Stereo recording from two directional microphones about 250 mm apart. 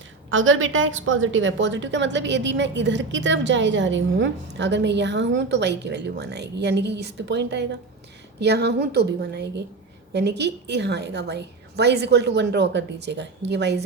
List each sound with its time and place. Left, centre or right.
0.3 s a woman's voice: right